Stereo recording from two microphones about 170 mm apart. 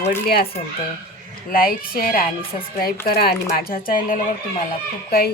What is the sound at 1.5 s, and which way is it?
Coin, 60° left (ahead or behind).